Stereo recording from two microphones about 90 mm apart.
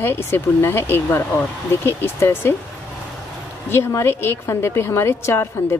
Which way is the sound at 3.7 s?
30° left (ahead or behind).